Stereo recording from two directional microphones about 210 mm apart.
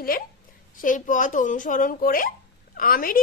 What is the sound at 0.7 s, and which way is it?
Speech, 40° left (ahead or behind).